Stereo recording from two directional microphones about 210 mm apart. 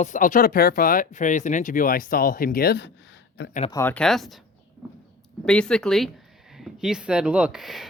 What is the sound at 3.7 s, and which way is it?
Speech, 10° left (ahead or behind).